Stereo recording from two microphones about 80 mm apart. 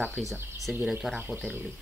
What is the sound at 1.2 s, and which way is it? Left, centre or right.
Speech, right.